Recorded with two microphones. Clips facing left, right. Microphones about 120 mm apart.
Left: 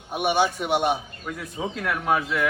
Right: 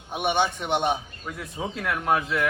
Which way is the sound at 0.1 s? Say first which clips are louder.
Left 2 dB; 5° left (ahead or behind).